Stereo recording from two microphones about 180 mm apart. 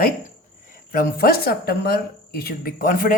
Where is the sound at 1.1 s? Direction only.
55° left (ahead or behind).